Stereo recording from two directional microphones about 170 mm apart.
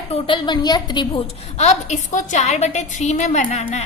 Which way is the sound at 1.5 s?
40° left (ahead or behind).